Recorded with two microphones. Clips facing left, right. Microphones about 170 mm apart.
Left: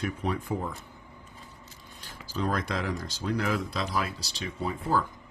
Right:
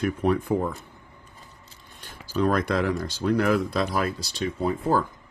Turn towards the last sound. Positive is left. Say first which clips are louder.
# right 5 dB
turn(degrees=-55)  # may be behind; listen again after turning